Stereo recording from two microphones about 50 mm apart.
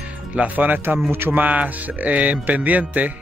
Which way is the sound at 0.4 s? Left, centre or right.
Right.